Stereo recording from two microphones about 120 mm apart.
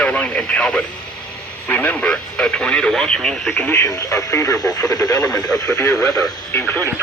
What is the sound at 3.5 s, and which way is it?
Speech, 15° left (ahead or behind).